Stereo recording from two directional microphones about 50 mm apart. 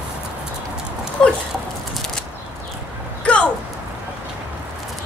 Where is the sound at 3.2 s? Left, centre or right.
Left.